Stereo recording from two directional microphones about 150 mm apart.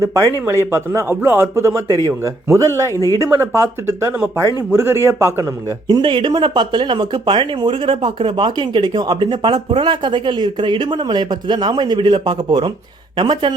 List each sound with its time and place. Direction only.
0.0 s speech: 20° right (ahead or behind)
2.9 s speech: 20° left (ahead or behind)
3.2 s speech: 20° right (ahead or behind)
6.0 s speech: 35° right (ahead or behind)